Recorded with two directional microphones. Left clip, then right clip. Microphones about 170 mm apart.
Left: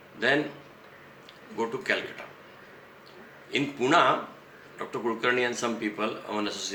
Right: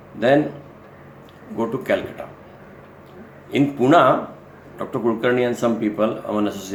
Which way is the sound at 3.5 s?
10° left (ahead or behind).